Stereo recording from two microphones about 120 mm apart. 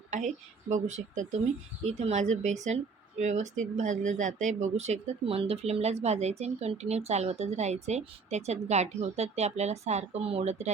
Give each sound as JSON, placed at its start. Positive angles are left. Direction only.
{"t": 0.1, "sound": "speech", "side_deg": -90}
{"t": 1.8, "sound": "speech", "side_deg": -65}